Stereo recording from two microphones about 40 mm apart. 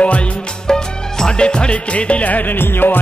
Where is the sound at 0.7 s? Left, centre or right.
Centre; by 2.5 s left.